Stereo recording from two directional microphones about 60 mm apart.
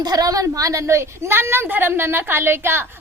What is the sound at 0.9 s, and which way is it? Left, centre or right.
A woman's voice, right.